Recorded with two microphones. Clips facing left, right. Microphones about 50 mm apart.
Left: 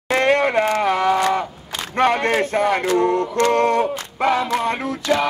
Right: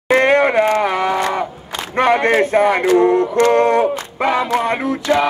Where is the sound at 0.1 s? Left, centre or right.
Right.